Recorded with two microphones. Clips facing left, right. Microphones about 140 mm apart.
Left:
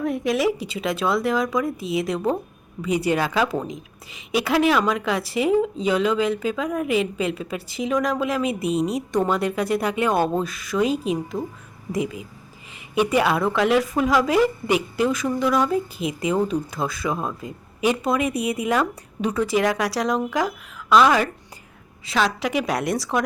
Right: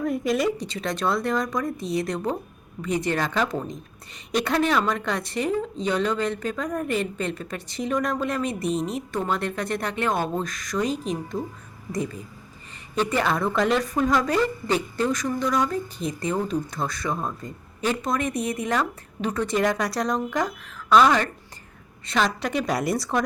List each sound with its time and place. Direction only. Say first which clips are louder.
0.0 s a woman's voice: left 2 dB; centre (ahead or behind)